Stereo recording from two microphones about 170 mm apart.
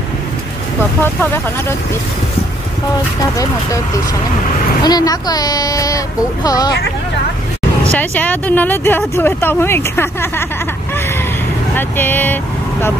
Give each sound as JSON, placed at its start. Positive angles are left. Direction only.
{"t": 1.0, "sound": "speech", "side_deg": 10}
{"t": 4.8, "sound": "speech", "side_deg": 20}
{"t": 7.9, "sound": "speech", "side_deg": 10}
{"t": 11.7, "sound": "speech", "side_deg": 10}